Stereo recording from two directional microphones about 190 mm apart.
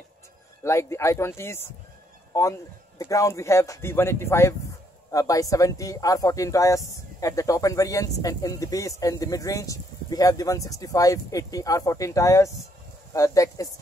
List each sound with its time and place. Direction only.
0.7 s speech: 15° left (ahead or behind)